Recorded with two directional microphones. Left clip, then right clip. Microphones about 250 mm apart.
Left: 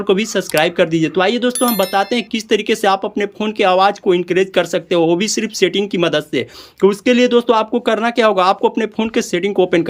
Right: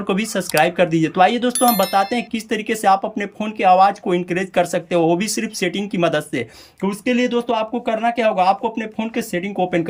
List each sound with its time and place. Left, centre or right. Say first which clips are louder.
0.1 s speech: left 4 dB; centre